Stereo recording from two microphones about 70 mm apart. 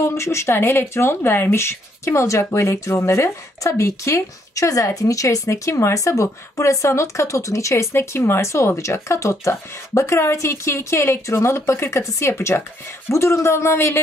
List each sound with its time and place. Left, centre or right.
0.0 s a man's voice: left